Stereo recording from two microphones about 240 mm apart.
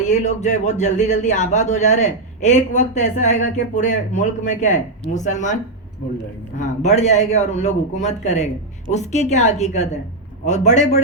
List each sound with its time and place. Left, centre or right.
0.1 s speech: left
6.6 s speech: left